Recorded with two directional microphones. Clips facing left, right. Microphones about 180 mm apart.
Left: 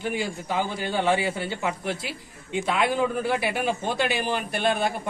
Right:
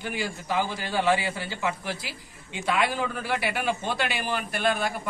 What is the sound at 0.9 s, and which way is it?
A man's voice, 25° left (ahead or behind).